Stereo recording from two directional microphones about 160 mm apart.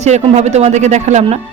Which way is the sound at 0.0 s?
45° right (ahead or behind).